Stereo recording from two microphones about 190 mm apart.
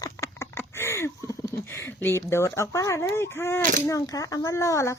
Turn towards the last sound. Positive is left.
turn(degrees=15)  # may be behind; listen again after turning